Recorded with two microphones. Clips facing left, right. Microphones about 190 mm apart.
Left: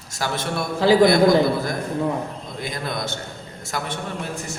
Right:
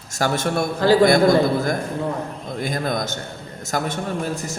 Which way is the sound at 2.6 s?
45° right (ahead or behind).